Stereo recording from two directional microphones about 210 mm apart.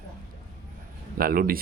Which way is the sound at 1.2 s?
45° right (ahead or behind).